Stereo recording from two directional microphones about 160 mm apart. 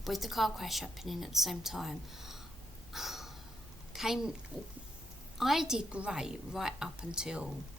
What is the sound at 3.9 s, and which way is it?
Speech, centre (ahead or behind).